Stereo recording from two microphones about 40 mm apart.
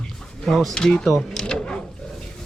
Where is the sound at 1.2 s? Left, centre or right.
Centre.